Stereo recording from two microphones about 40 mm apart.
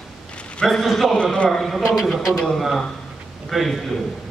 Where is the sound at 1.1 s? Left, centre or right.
Left.